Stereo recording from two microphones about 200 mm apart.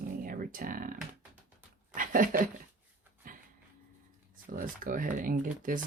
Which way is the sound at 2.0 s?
45° right (ahead or behind).